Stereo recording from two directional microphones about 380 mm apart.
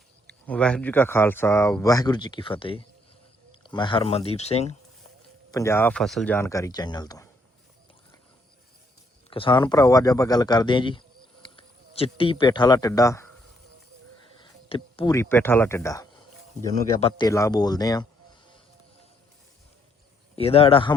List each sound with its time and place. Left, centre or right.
0.3 s speech: centre
9.3 s speech: centre
14.3 s speech: centre
20.3 s speech: centre